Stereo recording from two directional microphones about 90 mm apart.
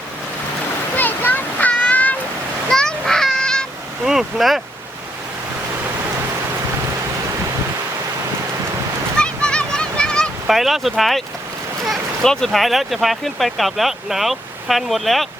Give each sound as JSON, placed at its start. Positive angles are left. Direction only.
{"t": 0.9, "sound": "a sound", "side_deg": 20}
{"t": 2.6, "sound": "honk", "side_deg": 5}
{"t": 4.0, "sound": "speech", "side_deg": -5}
{"t": 9.1, "sound": "waves", "side_deg": 10}
{"t": 10.4, "sound": "speech", "side_deg": 0}